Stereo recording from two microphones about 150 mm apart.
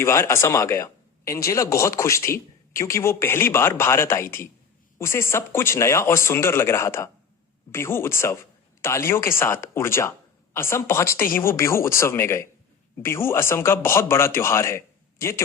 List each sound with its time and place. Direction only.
0.0 s speech: 20° left (ahead or behind)